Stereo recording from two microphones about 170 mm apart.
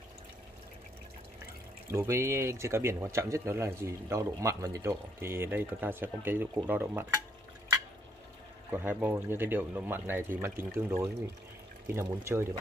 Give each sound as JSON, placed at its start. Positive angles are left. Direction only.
{"t": 1.9, "sound": "speech", "side_deg": -15}
{"t": 8.6, "sound": "speech", "side_deg": -10}